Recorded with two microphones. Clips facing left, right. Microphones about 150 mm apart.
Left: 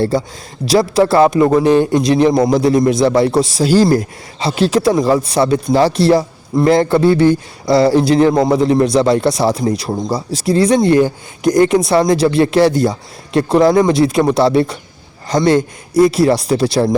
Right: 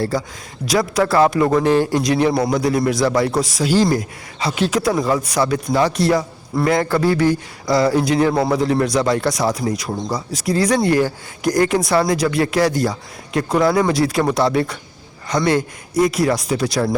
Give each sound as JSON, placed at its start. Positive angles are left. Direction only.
{"t": 0.0, "sound": "a man's voice", "side_deg": 25}